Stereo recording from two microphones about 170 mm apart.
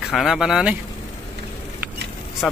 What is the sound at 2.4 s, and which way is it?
Speech, centre (ahead or behind).